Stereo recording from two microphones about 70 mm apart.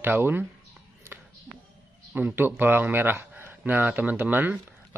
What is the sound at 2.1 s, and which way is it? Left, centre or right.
A man's voice, right.